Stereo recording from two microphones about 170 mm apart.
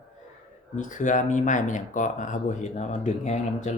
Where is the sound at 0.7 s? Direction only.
50° left (ahead or behind).